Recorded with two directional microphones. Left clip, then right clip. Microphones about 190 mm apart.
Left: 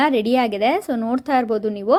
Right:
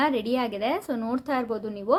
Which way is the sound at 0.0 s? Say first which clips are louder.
Left 7 dB; 30° left (ahead or behind).